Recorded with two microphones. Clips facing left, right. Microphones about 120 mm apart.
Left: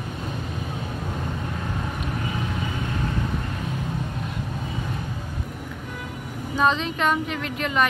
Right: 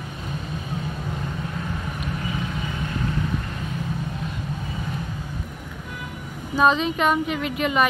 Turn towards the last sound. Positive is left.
turn(degrees=-10)  # may be behind; listen again after turning